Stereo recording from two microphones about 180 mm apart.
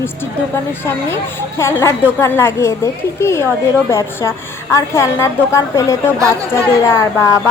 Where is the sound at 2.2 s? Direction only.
15° left (ahead or behind).